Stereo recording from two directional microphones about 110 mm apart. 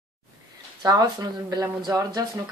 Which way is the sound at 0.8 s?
35° right (ahead or behind).